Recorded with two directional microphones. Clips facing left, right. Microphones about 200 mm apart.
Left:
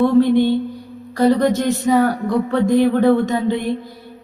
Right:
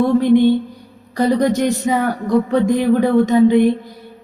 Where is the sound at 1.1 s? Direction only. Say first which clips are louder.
Left 1 dB; 15° right (ahead or behind).